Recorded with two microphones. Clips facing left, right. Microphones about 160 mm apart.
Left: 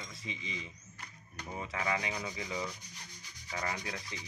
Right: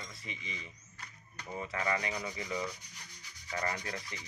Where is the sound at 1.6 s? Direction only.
10° left (ahead or behind).